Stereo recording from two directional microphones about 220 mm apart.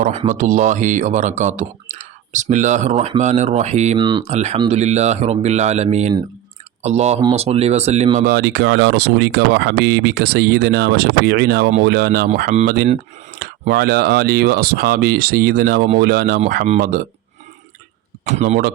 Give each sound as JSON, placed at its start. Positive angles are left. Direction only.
{"t": 0.0, "sound": "speech", "side_deg": -30}
{"t": 3.9, "sound": "speech", "side_deg": -20}
{"t": 8.3, "sound": "speech", "side_deg": -50}
{"t": 12.5, "sound": "speech", "side_deg": -30}
{"t": 13.4, "sound": "speech", "side_deg": -45}
{"t": 18.3, "sound": "speech", "side_deg": -35}